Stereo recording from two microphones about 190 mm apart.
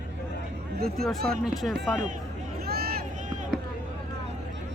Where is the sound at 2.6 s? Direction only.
55° right (ahead or behind).